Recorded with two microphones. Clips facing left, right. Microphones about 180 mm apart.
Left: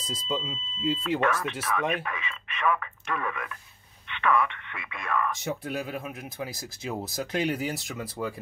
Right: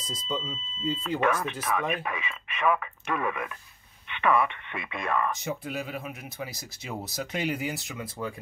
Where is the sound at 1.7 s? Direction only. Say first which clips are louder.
Left 1 dB; 5° right (ahead or behind); by 5.3 s 25° right (ahead or behind).